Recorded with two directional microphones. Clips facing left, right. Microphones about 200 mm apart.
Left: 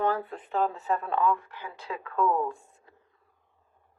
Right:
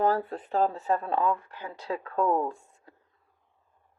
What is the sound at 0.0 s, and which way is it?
Speech, 40° right (ahead or behind).